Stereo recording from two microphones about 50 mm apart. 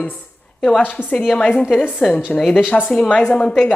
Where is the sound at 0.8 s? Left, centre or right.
Left.